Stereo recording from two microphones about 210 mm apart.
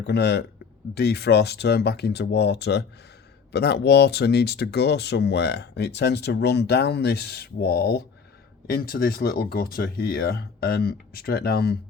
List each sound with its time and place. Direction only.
0.1 s speech: 50° left (ahead or behind)